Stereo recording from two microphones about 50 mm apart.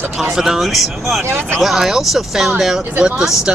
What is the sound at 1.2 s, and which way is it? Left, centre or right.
Speech, right.